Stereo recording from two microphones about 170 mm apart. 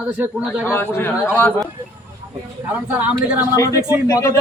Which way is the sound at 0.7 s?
15° left (ahead or behind).